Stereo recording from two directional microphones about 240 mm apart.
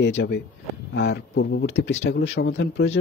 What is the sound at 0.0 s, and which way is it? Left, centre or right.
Speech, left.